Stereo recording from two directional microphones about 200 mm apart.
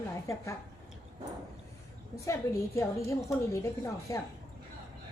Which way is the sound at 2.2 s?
15° left (ahead or behind).